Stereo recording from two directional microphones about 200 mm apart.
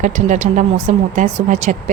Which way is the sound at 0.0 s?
40° right (ahead or behind).